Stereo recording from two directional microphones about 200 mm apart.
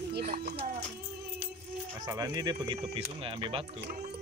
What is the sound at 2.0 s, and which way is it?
Speech, 20° right (ahead or behind).